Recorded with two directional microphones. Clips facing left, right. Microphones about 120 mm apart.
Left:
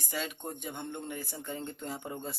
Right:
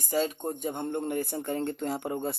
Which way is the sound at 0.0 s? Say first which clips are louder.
Right 9 dB; 40° right (ahead or behind).